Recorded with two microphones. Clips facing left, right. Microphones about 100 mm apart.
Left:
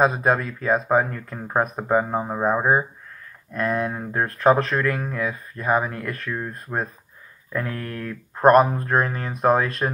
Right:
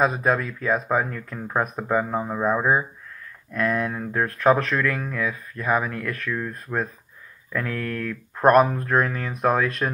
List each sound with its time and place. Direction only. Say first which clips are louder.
0.0 s speech: left 2 dB; 20° left (ahead or behind)